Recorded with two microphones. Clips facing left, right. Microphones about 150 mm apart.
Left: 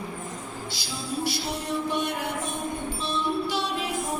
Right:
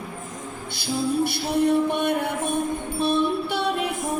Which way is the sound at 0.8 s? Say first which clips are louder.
Right 10 dB; 55° right (ahead or behind).